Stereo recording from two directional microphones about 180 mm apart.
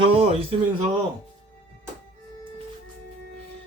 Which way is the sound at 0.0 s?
30° right (ahead or behind).